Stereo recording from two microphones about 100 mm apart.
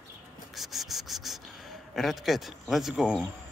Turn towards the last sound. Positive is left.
turn(degrees=-10)  # may be behind; listen again after turning